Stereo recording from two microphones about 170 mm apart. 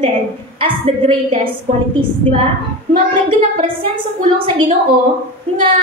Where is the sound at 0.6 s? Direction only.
30° right (ahead or behind).